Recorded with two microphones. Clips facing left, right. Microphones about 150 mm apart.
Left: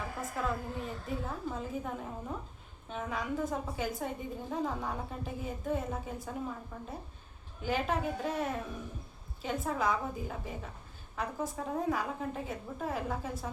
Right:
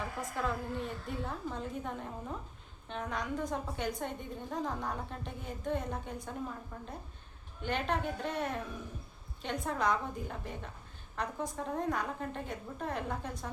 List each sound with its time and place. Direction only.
0.2 s a woman's voice: centre (ahead or behind)